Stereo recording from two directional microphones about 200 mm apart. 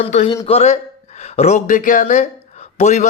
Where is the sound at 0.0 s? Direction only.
35° left (ahead or behind).